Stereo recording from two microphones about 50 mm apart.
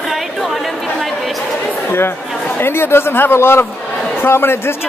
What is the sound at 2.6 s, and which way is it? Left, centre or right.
A man's voice, left.